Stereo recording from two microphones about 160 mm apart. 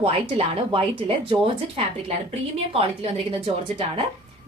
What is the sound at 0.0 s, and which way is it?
Speech, 35° right (ahead or behind).